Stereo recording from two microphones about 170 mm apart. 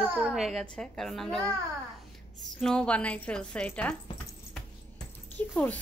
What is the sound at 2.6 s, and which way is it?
A woman's voice, 5° left (ahead or behind).